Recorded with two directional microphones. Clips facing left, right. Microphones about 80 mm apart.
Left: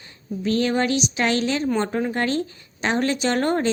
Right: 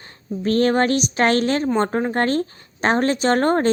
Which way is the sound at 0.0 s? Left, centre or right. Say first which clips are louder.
Right 2 dB; right.